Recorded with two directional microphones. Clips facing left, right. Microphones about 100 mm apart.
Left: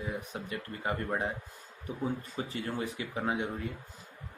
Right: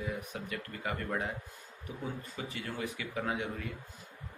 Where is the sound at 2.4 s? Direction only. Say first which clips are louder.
Left 4 dB; 30° left (ahead or behind).